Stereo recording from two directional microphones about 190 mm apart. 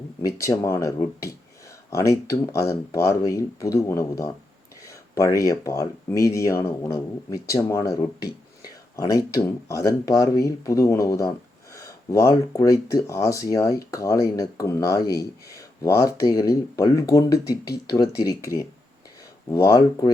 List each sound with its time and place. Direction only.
0.2 s speech: 15° left (ahead or behind)